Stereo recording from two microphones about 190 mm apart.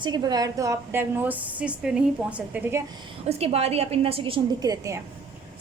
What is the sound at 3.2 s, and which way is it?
A woman's voice, 35° right (ahead or behind).